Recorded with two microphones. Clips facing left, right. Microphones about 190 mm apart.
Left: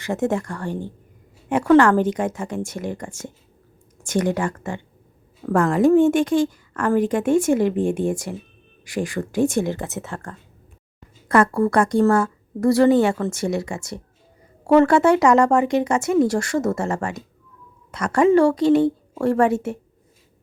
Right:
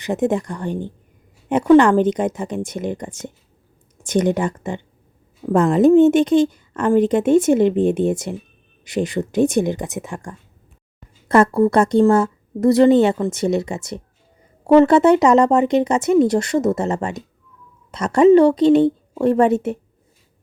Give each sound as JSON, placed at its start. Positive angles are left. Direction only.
{"t": 0.0, "sound": "speech", "side_deg": -20}